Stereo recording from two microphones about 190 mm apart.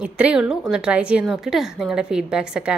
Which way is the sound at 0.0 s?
5° right (ahead or behind).